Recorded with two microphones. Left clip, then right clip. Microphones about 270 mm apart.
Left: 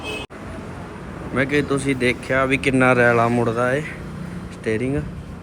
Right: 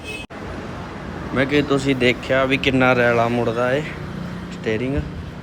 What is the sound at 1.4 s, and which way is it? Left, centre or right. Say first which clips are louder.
Speech: right 2 dB; centre.